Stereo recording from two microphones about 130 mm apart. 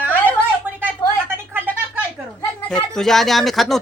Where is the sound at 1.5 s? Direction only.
15° right (ahead or behind).